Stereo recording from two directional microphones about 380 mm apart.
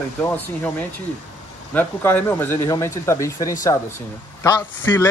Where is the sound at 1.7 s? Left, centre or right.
Centre.